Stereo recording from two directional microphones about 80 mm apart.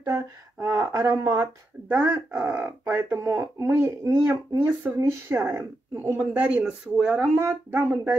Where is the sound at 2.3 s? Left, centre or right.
Right; by 7.3 s centre.